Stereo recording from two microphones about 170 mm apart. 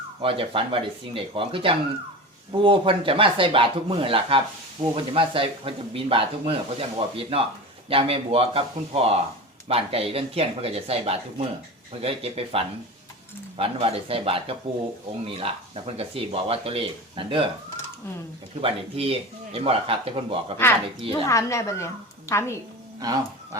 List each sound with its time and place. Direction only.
0.2 s speech: 30° right (ahead or behind)
18.6 s speech: 35° right (ahead or behind)
21.1 s a woman's voice: 15° left (ahead or behind)
23.0 s speech: 20° right (ahead or behind)